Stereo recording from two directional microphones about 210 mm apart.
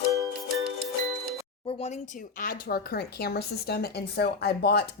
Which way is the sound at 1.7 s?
30° left (ahead or behind).